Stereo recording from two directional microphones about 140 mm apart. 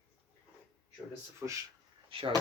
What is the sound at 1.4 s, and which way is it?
Speech, 10° right (ahead or behind).